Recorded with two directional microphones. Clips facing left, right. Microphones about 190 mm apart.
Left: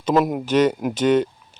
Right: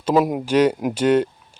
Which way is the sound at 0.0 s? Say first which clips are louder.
Right 1 dB; 10° right (ahead or behind).